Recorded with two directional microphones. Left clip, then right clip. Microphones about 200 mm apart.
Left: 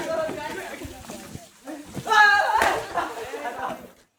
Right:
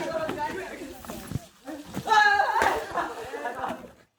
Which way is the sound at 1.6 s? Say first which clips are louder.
Left 1 dB; 25° right (ahead or behind).